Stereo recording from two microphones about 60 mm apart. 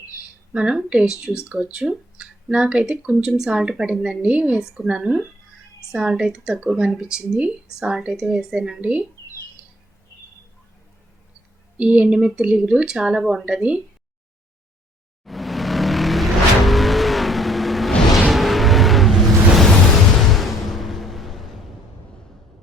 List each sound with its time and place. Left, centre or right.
0.5 s speech: centre
8.8 s speech: right
11.8 s speech: centre
15.2 s vehicle: centre
18.3 s music: centre